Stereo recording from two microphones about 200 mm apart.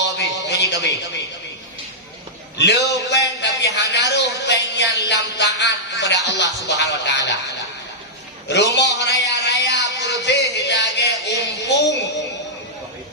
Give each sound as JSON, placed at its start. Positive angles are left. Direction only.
{"t": 0.0, "sound": "music", "side_deg": 60}
{"t": 2.6, "sound": "music", "side_deg": 60}
{"t": 8.4, "sound": "a sound", "side_deg": 60}
{"t": 11.6, "sound": "music", "side_deg": 60}